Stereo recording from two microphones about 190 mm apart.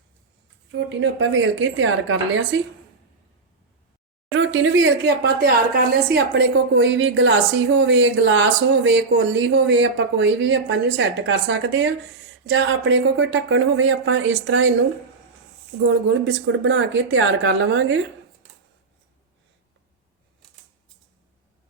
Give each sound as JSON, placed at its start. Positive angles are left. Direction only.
{"t": 0.9, "sound": "speech", "side_deg": -75}
{"t": 4.3, "sound": "speech", "side_deg": -90}
{"t": 15.9, "sound": "speech", "side_deg": -80}